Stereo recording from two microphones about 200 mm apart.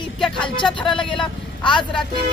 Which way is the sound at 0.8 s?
25° left (ahead or behind).